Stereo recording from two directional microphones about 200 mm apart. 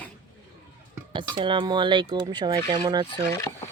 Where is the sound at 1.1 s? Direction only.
25° right (ahead or behind).